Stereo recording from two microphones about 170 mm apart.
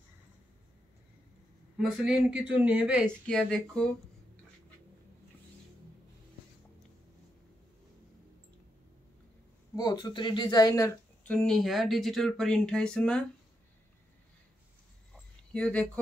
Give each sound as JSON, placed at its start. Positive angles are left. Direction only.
{"t": 1.8, "sound": "a man's voice", "side_deg": -5}
{"t": 3.3, "sound": "speech", "side_deg": 5}
{"t": 9.8, "sound": "speech", "side_deg": 25}
{"t": 15.5, "sound": "speech", "side_deg": 5}